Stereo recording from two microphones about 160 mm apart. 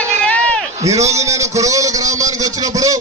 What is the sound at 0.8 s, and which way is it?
A man's voice, 20° right (ahead or behind).